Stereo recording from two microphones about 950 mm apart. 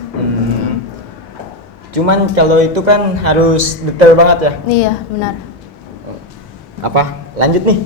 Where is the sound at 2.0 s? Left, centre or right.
Right.